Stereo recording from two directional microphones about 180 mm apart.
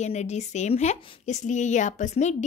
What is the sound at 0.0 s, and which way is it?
A woman's voice, 40° left (ahead or behind).